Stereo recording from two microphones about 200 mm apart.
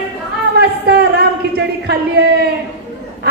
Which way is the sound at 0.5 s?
55° right (ahead or behind).